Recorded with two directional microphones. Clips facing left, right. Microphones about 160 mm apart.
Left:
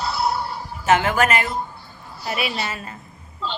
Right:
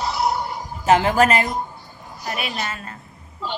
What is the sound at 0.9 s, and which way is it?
Speech, 30° right (ahead or behind).